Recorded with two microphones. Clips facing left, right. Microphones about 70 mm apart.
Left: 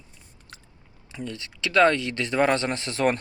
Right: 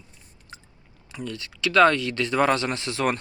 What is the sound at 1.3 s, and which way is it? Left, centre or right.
Speech, left.